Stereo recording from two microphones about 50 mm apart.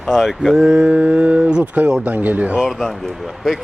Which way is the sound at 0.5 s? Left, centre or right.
Centre.